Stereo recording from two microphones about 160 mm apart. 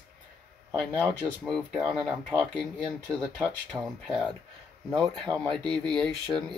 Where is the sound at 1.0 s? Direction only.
Centre (ahead or behind).